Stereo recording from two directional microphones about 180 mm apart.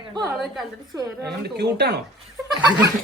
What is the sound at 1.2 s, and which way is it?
Speech, 65° right (ahead or behind).